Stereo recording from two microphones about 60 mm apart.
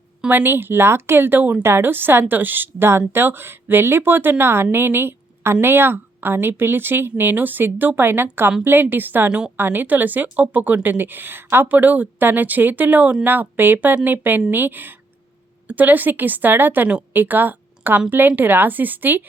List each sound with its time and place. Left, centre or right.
0.3 s a woman's voice: right